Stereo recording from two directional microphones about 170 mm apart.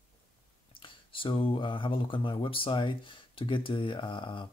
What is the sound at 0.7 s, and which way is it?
Speech, 30° left (ahead or behind).